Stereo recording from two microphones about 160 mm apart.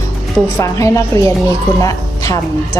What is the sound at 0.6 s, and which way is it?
A woman's voice, 20° left (ahead or behind).